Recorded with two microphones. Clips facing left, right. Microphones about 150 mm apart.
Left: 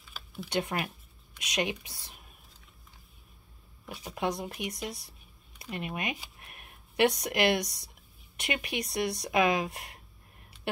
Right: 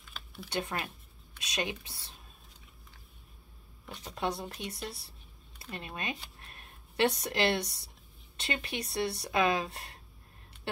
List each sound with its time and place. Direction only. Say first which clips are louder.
0.0 s a sound: left 4 dB; 5° left (ahead or behind)
0.5 s speech: left 4 dB; 15° left (ahead or behind)
3.8 s speech: left 2 dB; 10° left (ahead or behind)